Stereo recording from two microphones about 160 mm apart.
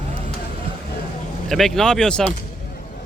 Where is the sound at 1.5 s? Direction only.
Centre (ahead or behind).